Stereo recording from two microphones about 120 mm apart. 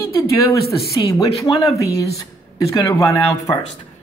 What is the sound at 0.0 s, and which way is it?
Speech, 25° left (ahead or behind).